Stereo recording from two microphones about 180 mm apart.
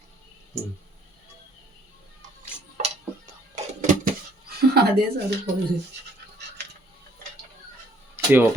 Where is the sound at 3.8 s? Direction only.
45° right (ahead or behind).